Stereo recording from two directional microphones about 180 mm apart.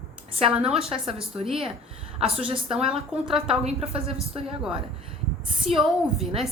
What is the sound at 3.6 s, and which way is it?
Speech, 35° right (ahead or behind).